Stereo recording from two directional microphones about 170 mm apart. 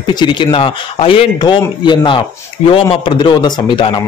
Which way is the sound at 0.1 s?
25° left (ahead or behind).